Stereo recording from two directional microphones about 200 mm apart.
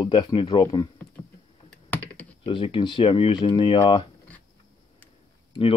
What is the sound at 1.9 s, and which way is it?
Computer keyboard, 5° left (ahead or behind).